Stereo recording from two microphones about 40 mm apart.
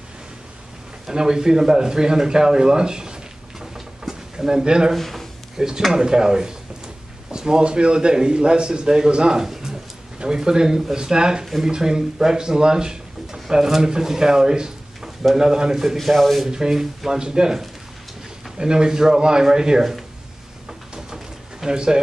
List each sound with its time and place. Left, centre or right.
1.0 s speech: centre
3.7 s drawer open or close: centre
4.9 s speech: centre
5.6 s a man's voice: centre
16.0 s speech: centre
16.4 s speech: centre
20.9 s pigeon: centre